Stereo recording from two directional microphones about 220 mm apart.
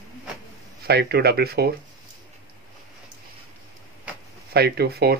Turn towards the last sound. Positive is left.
turn(degrees=-45)  # may be behind; listen again after turning